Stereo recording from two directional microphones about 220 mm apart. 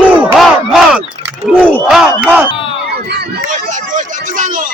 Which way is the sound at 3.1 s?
40° right (ahead or behind).